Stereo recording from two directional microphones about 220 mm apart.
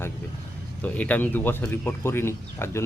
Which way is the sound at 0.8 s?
5° left (ahead or behind).